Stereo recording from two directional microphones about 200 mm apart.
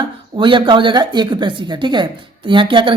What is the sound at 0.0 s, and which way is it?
Speech, 25° right (ahead or behind).